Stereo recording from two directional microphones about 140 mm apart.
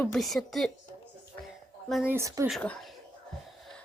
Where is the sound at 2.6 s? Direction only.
10° left (ahead or behind).